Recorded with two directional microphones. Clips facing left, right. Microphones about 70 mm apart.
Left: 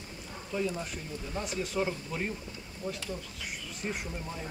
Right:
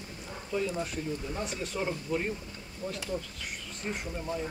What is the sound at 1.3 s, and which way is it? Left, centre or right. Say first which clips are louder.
Speech: left 2 dB; centre.